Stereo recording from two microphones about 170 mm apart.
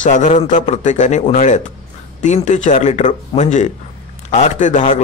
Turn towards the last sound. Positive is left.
turn(degrees=45)  # may be behind; listen again after turning